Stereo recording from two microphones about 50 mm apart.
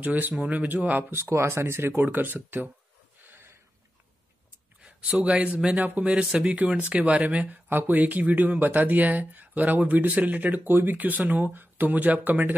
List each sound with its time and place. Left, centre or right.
0.0 s speech: right
1.1 s speech: right
3.3 s a sound: right
5.2 s speech: right